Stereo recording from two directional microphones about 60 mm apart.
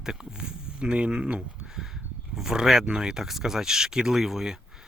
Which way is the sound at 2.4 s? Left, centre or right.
Centre.